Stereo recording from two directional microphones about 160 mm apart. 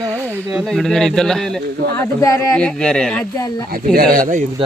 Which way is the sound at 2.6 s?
5° left (ahead or behind).